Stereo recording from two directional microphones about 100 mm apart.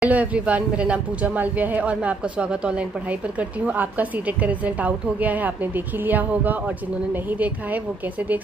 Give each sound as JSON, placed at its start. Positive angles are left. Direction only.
{"t": 0.0, "sound": "speech", "side_deg": -15}